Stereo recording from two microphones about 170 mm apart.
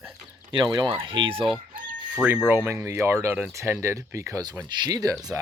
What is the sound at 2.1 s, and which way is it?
Speech, 5° right (ahead or behind).